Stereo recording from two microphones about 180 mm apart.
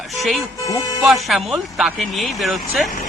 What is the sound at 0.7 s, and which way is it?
Speech, 20° left (ahead or behind).